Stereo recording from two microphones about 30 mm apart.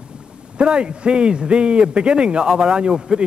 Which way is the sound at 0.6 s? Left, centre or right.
Right.